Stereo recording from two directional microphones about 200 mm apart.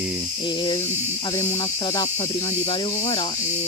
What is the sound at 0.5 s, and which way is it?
Speech, 25° left (ahead or behind).